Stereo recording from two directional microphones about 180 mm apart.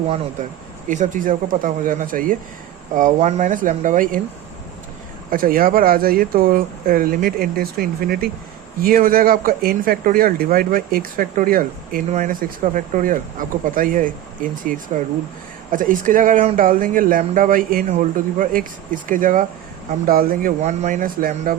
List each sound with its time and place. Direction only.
0.9 s speech: 45° right (ahead or behind)
5.3 s speech: 50° right (ahead or behind)
20.6 s speech: 40° right (ahead or behind)